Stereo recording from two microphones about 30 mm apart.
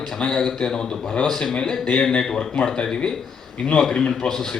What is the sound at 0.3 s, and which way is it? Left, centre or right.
Speech, centre.